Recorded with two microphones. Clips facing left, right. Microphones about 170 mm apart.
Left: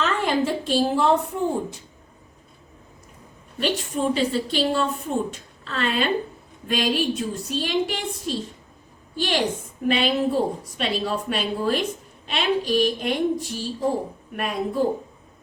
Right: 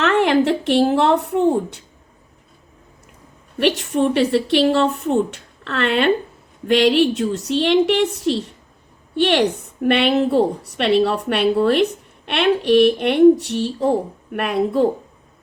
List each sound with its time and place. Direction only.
0.0 s a woman's voice: 70° right (ahead or behind)
3.6 s a woman's voice: 70° right (ahead or behind)